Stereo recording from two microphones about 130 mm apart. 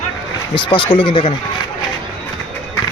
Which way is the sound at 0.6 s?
40° left (ahead or behind).